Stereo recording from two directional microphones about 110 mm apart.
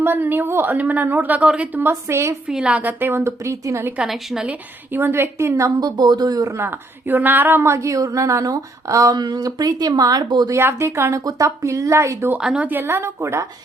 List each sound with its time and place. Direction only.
0.0 s a woman's voice: 20° right (ahead or behind)
2.5 s a woman's voice: 10° right (ahead or behind); by 3.9 s 25° right (ahead or behind)
3.9 s a woman's voice: 5° right (ahead or behind)
4.9 s a woman's voice: 20° right (ahead or behind); by 6.5 s 35° right (ahead or behind)
6.6 s a woman's voice: 20° right (ahead or behind); by 10.5 s 40° right (ahead or behind)
10.5 s a woman's voice: 25° right (ahead or behind)
12.4 s a woman's voice: 10° right (ahead or behind); by 13.5 s 25° right (ahead or behind)